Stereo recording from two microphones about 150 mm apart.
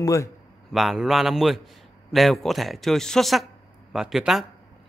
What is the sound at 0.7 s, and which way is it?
Speech, centre (ahead or behind).